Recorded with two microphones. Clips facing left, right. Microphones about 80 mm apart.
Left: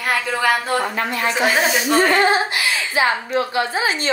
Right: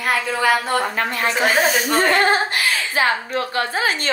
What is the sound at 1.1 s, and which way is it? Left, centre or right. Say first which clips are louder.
Speech: even; right.